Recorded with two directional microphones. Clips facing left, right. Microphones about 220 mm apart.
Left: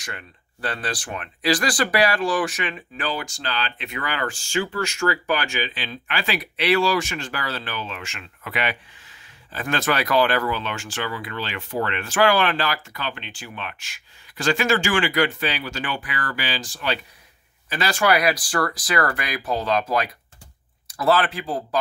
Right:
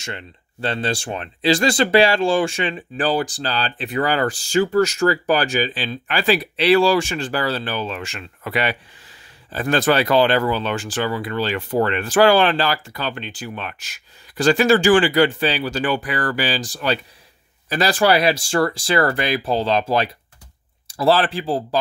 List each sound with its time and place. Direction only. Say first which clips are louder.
0.0 s speech: right 5 dB; 25° right (ahead or behind)